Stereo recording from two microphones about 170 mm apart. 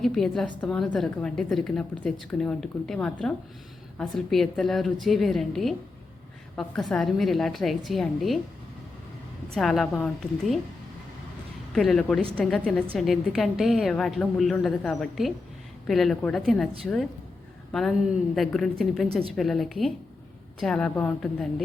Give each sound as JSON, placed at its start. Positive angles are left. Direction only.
{"t": 0.0, "sound": "a woman's voice", "side_deg": 0}
{"t": 9.6, "sound": "a woman's voice", "side_deg": 0}
{"t": 11.7, "sound": "a woman's voice", "side_deg": 0}